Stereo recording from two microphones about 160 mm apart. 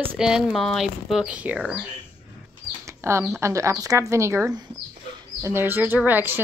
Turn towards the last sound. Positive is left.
turn(degrees=-10)  # may be behind; listen again after turning